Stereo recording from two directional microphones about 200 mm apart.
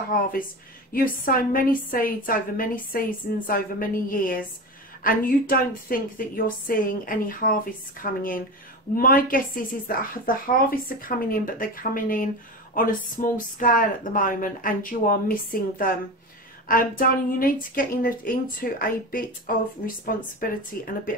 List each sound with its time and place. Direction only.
0.1 s a woman's voice: 40° left (ahead or behind)
16.6 s a woman's voice: 45° left (ahead or behind)